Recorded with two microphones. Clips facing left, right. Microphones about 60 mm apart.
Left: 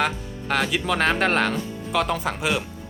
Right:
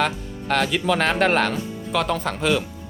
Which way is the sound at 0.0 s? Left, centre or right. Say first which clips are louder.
Right 1 dB; centre.